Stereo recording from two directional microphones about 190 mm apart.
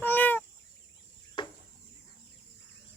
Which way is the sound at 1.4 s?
25° left (ahead or behind).